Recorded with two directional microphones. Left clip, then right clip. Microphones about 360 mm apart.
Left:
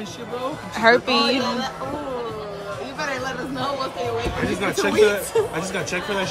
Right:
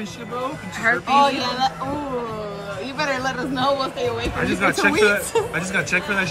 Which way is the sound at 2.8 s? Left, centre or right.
Centre.